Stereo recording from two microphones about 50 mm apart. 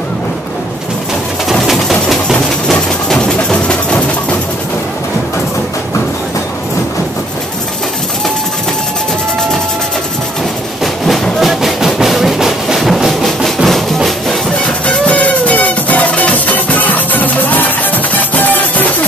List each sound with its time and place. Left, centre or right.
1.7 s a sound: centre
2.7 s music: centre
11.3 s music: centre
15.0 s music: left